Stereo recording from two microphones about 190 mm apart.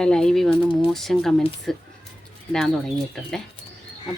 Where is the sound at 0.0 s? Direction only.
5° left (ahead or behind).